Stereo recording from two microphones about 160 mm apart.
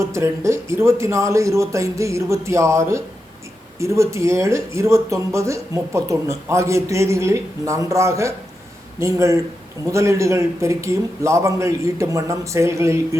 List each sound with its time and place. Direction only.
0.0 s speech: 15° right (ahead or behind)